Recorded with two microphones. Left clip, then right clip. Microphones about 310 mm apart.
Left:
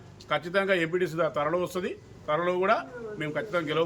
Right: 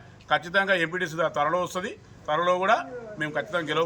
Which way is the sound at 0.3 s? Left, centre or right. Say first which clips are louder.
Right 3 dB; centre.